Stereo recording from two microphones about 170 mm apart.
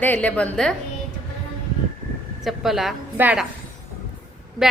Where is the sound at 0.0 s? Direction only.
10° left (ahead or behind).